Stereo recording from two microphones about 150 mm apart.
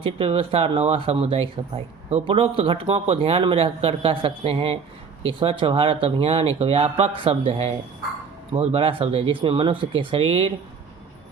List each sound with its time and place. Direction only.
0.0 s speech: 35° right (ahead or behind)